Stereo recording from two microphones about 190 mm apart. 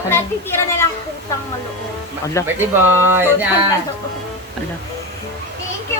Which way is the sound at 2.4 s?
15° left (ahead or behind).